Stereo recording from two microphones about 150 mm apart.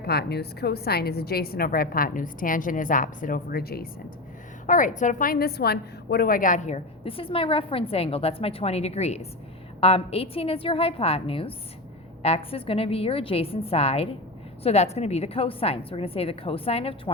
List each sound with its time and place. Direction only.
0.0 s a woman's voice: 90° left
4.6 s a woman's voice: 60° left (ahead or behind); by 16.9 s 40° left (ahead or behind)